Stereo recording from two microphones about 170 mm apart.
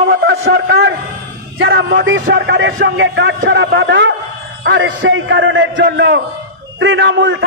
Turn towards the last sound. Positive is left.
turn(degrees=-90)